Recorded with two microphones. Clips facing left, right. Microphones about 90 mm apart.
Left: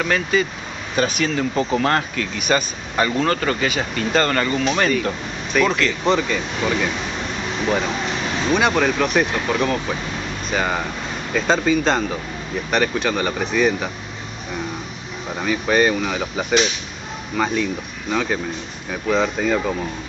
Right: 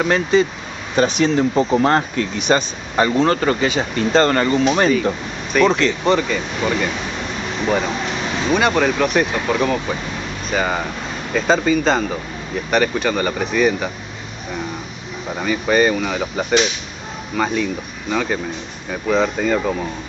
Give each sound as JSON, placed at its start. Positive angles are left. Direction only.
{"t": 0.0, "sound": "speech", "side_deg": -30}
{"t": 5.5, "sound": "speech", "side_deg": 0}
{"t": 15.3, "sound": "speech", "side_deg": 0}